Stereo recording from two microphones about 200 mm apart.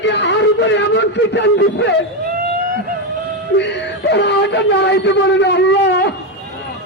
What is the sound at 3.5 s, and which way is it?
Speech, 60° left (ahead or behind).